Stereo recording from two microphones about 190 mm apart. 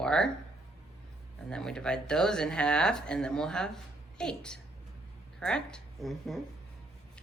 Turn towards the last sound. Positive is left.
turn(degrees=0)  # may be behind; listen again after turning